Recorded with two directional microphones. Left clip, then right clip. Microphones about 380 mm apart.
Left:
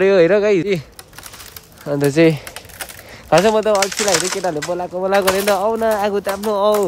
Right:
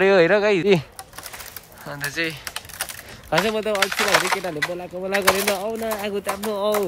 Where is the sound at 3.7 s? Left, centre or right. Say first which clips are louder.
Left 3 dB; centre.